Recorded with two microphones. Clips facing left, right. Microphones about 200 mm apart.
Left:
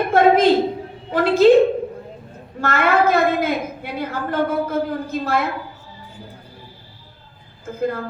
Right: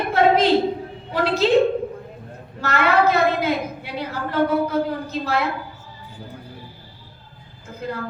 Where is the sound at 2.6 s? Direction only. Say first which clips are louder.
Left 1 dB; 50° left (ahead or behind).